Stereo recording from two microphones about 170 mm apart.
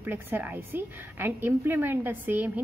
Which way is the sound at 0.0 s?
10° right (ahead or behind).